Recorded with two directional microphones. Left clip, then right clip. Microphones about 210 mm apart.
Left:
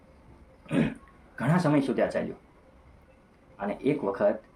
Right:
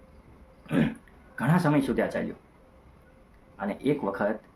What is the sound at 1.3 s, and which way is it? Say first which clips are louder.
Speech: even; 15° right (ahead or behind).